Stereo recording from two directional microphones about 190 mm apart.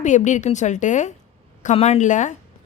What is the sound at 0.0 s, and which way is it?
A woman's voice, 40° left (ahead or behind).